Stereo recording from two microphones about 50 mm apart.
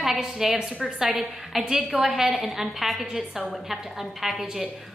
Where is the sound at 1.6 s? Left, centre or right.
Centre.